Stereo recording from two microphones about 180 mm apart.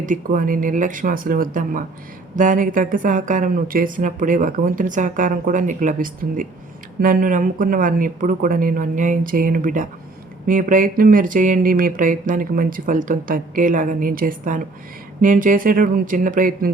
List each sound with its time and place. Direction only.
0.0 s speech: 50° right (ahead or behind)